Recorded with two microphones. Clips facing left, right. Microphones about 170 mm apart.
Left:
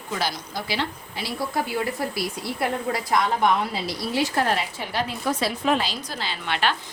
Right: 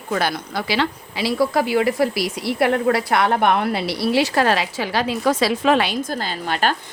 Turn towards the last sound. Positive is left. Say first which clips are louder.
# right 4 dB
turn(degrees=-40)  # may be behind; listen again after turning